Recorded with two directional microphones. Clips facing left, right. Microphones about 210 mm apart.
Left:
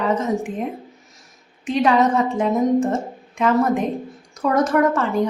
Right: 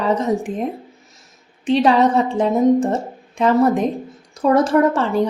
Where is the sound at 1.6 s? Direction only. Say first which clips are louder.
Right 3 dB; 30° right (ahead or behind).